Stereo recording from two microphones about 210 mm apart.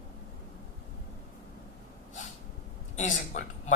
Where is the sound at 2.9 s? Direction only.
35° left (ahead or behind).